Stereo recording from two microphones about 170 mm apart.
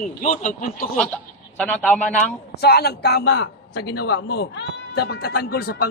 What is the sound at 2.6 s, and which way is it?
A man's voice, 70° left (ahead or behind).